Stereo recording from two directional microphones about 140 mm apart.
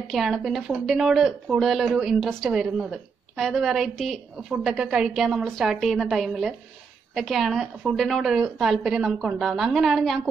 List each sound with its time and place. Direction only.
0.1 s speech: centre (ahead or behind)